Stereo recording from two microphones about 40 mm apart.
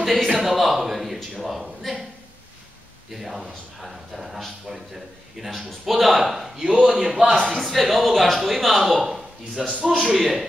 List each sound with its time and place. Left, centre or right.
0.0 s a man's voice: centre
0.4 s speech: centre
3.2 s speech: centre
6.5 s a man's voice: centre
7.4 s speech: centre